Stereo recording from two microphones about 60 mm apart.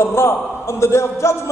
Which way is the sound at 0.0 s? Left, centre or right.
Left.